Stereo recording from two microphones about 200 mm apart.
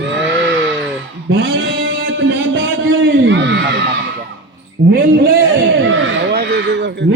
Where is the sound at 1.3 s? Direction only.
70° right (ahead or behind).